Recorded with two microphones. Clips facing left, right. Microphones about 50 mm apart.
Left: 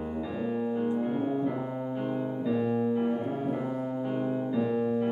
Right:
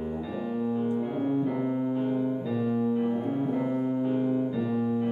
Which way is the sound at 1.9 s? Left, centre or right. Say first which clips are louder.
Right 4 dB; centre.